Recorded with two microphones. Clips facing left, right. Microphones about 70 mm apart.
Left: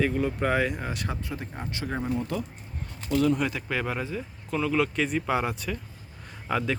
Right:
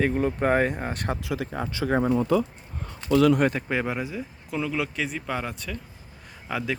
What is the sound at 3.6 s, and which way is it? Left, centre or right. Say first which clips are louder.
Speech: right 2 dB; centre.